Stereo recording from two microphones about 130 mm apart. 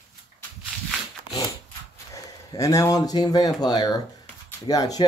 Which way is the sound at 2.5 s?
25° left (ahead or behind).